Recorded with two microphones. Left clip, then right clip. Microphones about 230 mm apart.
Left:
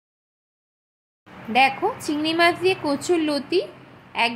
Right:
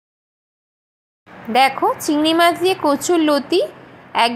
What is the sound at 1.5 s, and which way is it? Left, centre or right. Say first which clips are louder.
A woman's voice: right 4 dB; centre.